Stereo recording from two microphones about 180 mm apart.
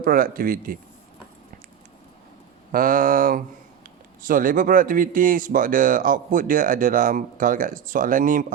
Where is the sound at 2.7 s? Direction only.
50° right (ahead or behind).